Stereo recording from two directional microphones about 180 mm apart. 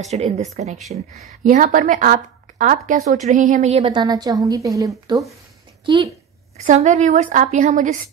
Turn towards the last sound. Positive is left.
turn(degrees=-40)  # may be behind; listen again after turning